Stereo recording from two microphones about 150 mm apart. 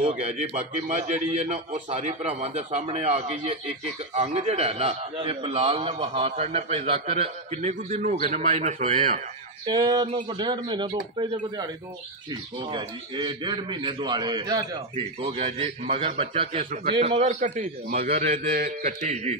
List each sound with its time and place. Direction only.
0.0 s a man's voice: 55° right (ahead or behind)
9.7 s a man's voice: 30° right (ahead or behind)
15.1 s a man's voice: 45° right (ahead or behind); by 18.2 s 80° right
18.2 s a man's voice: 45° right (ahead or behind)
18.5 s a man's voice: 80° right